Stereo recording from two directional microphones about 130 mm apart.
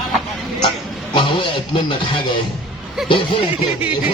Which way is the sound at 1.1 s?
40° left (ahead or behind).